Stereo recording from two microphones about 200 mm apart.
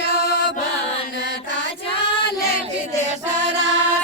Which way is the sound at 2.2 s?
50° left (ahead or behind).